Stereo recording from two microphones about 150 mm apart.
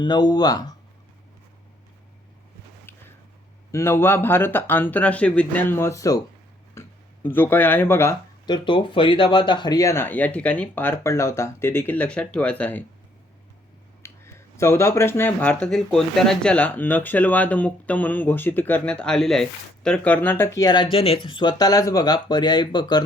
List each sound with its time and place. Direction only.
0.0 s speech: 30° left (ahead or behind)
2.9 s a sound: 15° left (ahead or behind)
3.7 s speech: 20° left (ahead or behind)
8.4 s speech: 30° left (ahead or behind); by 12.8 s 10° left (ahead or behind)
14.0 s speech: 20° left (ahead or behind)